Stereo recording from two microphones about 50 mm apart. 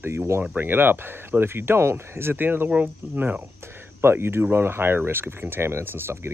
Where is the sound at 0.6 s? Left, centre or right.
Right.